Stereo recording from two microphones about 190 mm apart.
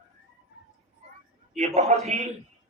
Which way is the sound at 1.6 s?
35° right (ahead or behind).